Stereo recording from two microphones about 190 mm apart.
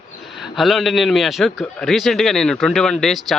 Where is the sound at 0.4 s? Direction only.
Centre (ahead or behind).